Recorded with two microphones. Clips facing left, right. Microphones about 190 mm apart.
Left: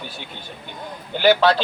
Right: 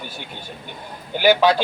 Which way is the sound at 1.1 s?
10° right (ahead or behind).